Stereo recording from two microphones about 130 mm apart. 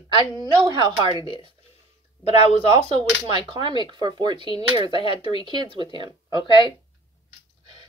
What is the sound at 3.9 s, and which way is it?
Speech, 35° right (ahead or behind).